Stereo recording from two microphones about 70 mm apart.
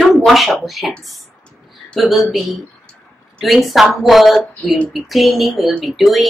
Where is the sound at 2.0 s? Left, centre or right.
Centre.